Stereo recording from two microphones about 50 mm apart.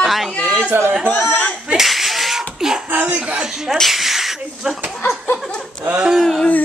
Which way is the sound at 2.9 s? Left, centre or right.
Right.